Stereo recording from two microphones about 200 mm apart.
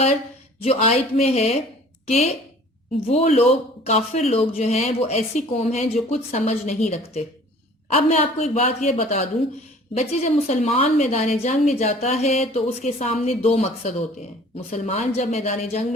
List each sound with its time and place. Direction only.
0.6 s a woman's voice: 30° left (ahead or behind)